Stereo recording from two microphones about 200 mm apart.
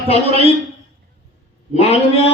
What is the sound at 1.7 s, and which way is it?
Speech, 30° left (ahead or behind).